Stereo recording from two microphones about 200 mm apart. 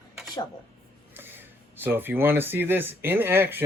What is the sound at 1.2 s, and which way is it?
Speech, 10° right (ahead or behind).